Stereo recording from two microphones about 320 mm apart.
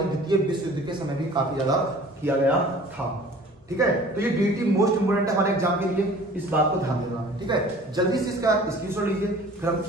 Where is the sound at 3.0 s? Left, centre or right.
Centre.